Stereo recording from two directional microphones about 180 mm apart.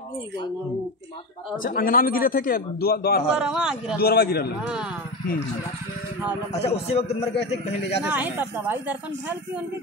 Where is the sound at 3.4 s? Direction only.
5° right (ahead or behind).